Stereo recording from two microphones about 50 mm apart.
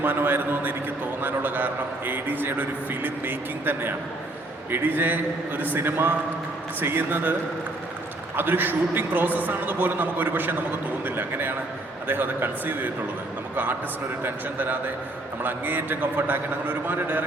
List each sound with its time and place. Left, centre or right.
0.0 s a man's voice: right
8.4 s a man's voice: right
14.3 s a man's voice: right